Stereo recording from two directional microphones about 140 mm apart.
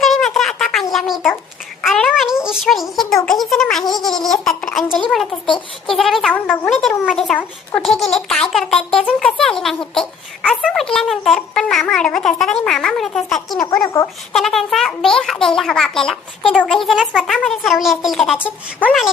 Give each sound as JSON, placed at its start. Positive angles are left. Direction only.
{"t": 0.0, "sound": "a sound", "side_deg": 0}
{"t": 0.9, "sound": "a child's voice", "side_deg": 0}
{"t": 13.8, "sound": "speech", "side_deg": 25}
{"t": 14.3, "sound": "speech", "side_deg": 0}